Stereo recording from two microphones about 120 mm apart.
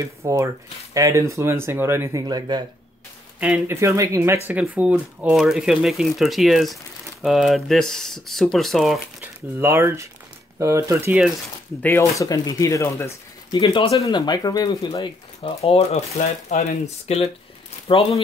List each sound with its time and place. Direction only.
0.0 s speech: 25° right (ahead or behind)
2.2 s speech: 35° right (ahead or behind)
3.3 s speech: 10° right (ahead or behind)
3.6 s speech: 25° right (ahead or behind)
4.5 s speech: 10° right (ahead or behind)
9.2 s speech: 20° right (ahead or behind)
12.0 s speech: 30° left (ahead or behind)
13.5 s speech: 40° left (ahead or behind)
15.6 s speech: 60° left (ahead or behind)
17.8 s speech: 55° left (ahead or behind)